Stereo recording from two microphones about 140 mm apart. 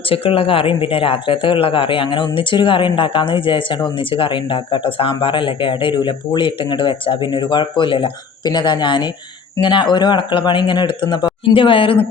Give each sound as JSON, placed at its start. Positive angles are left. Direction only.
{"t": 0.1, "sound": "speech", "side_deg": 40}